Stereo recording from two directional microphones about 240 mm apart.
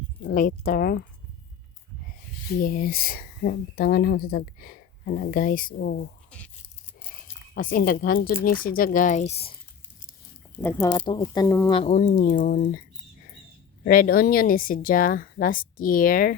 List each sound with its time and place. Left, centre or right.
0.3 s speech: left
2.5 s speech: left
7.5 s speech: left
10.6 s speech: centre; by 12.8 s left
13.8 s speech: left